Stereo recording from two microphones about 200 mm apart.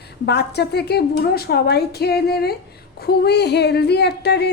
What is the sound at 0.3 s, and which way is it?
A woman's voice, 55° left (ahead or behind).